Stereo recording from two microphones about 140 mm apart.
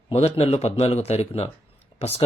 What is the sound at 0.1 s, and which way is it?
Speech, 50° left (ahead or behind).